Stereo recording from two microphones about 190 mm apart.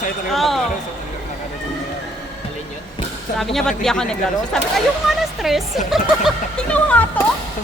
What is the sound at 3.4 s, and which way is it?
A woman's voice, centre (ahead or behind).